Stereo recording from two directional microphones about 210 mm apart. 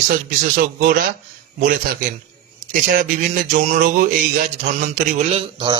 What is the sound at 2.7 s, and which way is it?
A man's voice, 40° right (ahead or behind).